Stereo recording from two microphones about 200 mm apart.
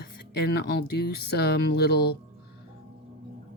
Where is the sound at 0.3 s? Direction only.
50° left (ahead or behind).